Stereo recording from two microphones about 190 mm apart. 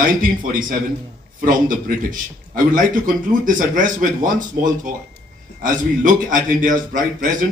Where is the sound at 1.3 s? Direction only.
45° right (ahead or behind).